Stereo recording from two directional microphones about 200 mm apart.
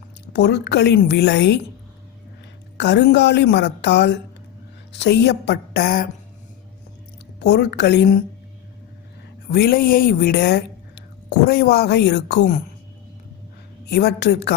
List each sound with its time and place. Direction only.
0.3 s a woman's voice: 60° left (ahead or behind)
2.7 s a woman's voice: 60° left (ahead or behind)
7.3 s a woman's voice: 55° left (ahead or behind)
9.5 s speech: 50° left (ahead or behind)
13.8 s a woman's voice: 55° left (ahead or behind)